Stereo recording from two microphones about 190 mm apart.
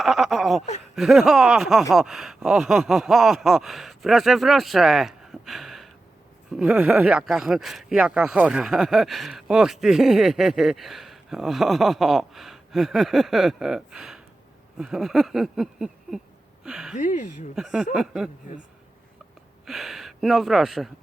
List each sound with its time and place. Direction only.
0.0 s a sound: centre (ahead or behind)
0.9 s speech: centre (ahead or behind)
17.0 s speech: 40° left (ahead or behind)
17.5 s speech: 5° right (ahead or behind)
19.6 s speech: centre (ahead or behind)